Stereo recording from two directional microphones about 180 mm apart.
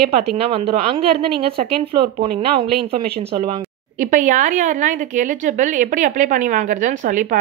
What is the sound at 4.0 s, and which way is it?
A woman's voice, 45° right (ahead or behind).